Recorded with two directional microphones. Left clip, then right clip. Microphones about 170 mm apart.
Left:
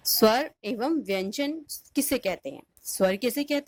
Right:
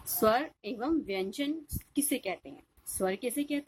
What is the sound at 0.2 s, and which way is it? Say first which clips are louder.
A woman's voice: left 4 dB; 40° left (ahead or behind).